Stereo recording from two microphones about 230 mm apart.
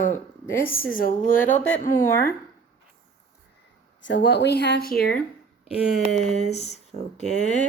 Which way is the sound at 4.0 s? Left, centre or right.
Left.